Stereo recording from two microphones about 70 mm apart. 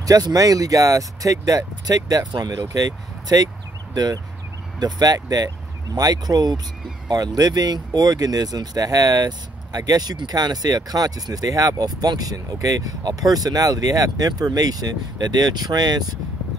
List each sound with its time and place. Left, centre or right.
0.0 s speech: right